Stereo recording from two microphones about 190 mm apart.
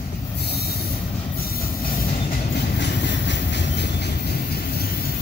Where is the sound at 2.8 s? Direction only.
65° left (ahead or behind).